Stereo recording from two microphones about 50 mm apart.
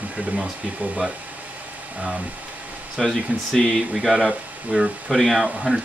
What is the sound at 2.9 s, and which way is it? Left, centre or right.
Speech, centre.